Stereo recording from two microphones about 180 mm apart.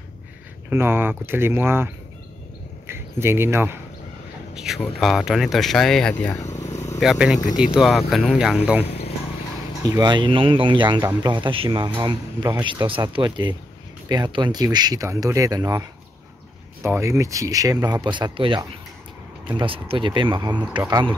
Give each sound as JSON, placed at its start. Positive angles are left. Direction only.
{"t": 0.7, "sound": "speech", "side_deg": -10}
{"t": 2.9, "sound": "speech", "side_deg": -15}
{"t": 4.6, "sound": "speech", "side_deg": 0}
{"t": 7.0, "sound": "speech", "side_deg": -5}
{"t": 9.8, "sound": "speech", "side_deg": -20}
{"t": 12.4, "sound": "speech", "side_deg": -10}
{"t": 12.6, "sound": "speech", "side_deg": -25}